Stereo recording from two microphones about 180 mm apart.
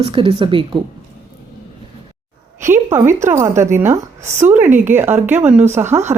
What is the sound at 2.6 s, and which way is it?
A woman's voice, 15° right (ahead or behind).